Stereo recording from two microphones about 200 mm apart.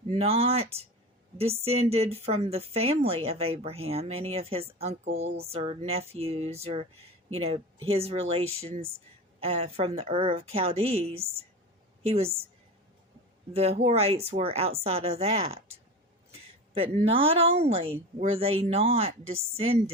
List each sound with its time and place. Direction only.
0.1 s a woman's voice: 30° right (ahead or behind)
13.5 s a woman's voice: 30° right (ahead or behind)